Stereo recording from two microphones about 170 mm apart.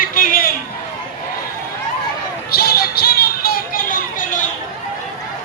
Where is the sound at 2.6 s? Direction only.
65° left (ahead or behind).